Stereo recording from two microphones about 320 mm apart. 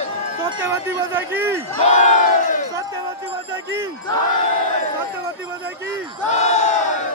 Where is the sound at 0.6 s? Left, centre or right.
Centre.